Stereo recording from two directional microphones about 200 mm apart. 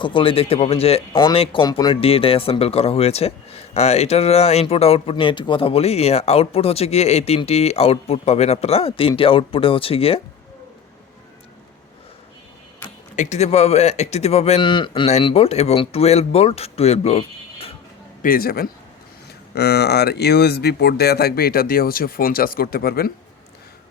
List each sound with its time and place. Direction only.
0.0 s speech: 25° left (ahead or behind)
13.1 s speech: 35° left (ahead or behind)
18.2 s speech: 45° left (ahead or behind)